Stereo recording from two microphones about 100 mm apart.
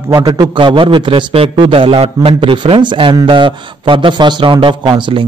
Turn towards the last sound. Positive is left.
turn(degrees=-60)  # may be behind; listen again after turning